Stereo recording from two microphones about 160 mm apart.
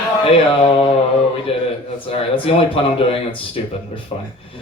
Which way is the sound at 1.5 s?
40° left (ahead or behind).